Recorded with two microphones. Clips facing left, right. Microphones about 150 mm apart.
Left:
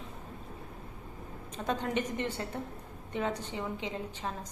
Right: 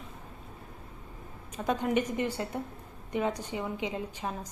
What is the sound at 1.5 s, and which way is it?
A woman's voice, 10° right (ahead or behind).